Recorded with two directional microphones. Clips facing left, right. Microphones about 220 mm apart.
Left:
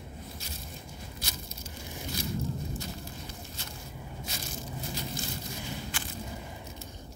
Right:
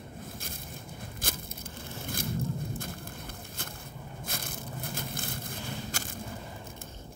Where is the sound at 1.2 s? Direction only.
50° right (ahead or behind).